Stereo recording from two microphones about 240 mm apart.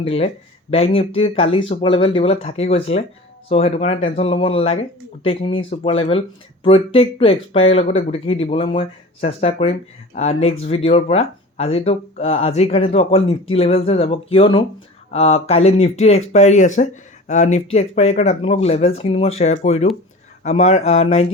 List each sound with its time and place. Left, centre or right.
0.0 s speech: left